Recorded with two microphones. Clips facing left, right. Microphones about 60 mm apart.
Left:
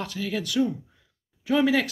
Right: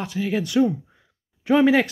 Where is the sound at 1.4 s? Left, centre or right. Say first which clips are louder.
Right 5 dB; right.